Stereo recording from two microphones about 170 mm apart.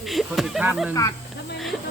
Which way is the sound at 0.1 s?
Centre (ahead or behind).